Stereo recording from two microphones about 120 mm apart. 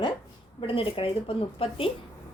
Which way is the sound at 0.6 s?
50° left (ahead or behind).